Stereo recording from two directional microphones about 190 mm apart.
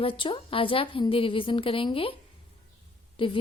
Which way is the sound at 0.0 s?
25° left (ahead or behind).